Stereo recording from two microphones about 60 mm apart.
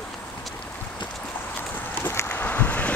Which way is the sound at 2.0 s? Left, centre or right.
Left.